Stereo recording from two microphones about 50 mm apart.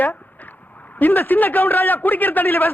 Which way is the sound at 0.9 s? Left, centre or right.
Left.